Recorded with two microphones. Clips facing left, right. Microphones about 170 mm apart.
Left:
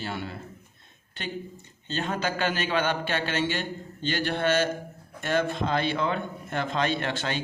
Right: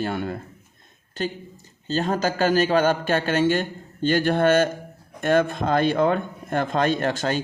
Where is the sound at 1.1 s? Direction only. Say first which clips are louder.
Right 6 dB; 40° right (ahead or behind).